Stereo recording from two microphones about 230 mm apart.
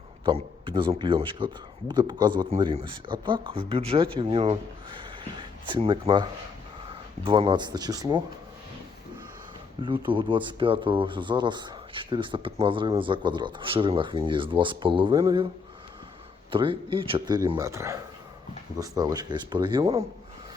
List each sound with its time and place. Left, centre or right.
0.3 s speech: right
7.3 s speech: right
9.8 s speech: right
16.5 s speech: right